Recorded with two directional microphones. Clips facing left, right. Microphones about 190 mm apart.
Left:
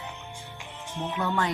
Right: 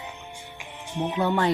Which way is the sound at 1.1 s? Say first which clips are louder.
Right 5 dB; 35° right (ahead or behind).